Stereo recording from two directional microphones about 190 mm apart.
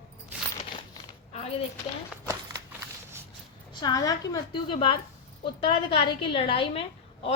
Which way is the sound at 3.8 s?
20° left (ahead or behind).